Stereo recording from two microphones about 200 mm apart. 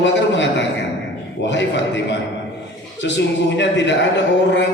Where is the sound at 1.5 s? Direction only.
65° left (ahead or behind).